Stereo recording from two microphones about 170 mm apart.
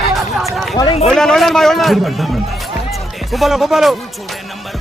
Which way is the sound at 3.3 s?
Centre (ahead or behind).